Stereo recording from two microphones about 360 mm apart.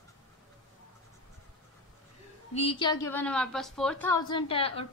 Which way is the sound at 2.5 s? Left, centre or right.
Centre.